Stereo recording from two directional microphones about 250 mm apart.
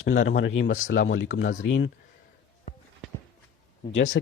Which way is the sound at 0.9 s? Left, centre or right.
Left.